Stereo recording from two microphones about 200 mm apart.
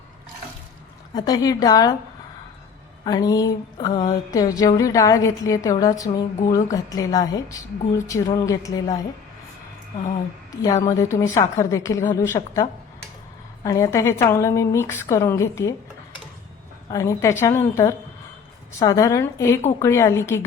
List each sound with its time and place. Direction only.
1.1 s a woman's voice: 20° left (ahead or behind)
3.0 s a woman's voice: 20° left (ahead or behind)
10.5 s a woman's voice: 15° left (ahead or behind)
13.7 s a woman's voice: 15° left (ahead or behind)
16.9 s a woman's voice: 15° left (ahead or behind)